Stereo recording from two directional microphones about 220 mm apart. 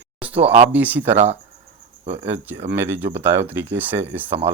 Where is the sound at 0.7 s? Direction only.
5° right (ahead or behind).